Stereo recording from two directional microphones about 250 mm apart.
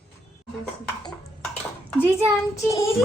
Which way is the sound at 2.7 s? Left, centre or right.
Left.